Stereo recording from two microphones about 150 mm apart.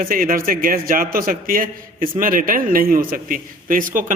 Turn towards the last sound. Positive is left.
turn(degrees=-65)  # may be behind; listen again after turning